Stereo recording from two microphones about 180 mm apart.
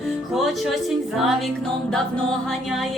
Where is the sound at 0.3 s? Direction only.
Centre (ahead or behind).